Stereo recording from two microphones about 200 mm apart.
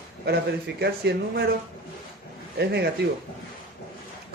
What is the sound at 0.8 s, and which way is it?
Speech, 55° right (ahead or behind).